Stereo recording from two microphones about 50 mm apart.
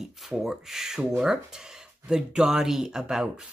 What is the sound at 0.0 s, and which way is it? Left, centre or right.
Speech, centre.